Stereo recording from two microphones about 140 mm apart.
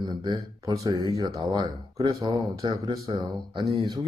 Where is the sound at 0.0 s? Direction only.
30° right (ahead or behind).